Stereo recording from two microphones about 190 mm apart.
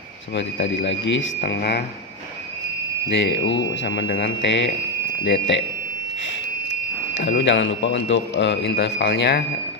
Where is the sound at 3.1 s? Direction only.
70° left (ahead or behind).